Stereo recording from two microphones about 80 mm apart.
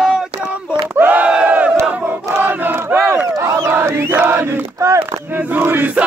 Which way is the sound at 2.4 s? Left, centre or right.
Right.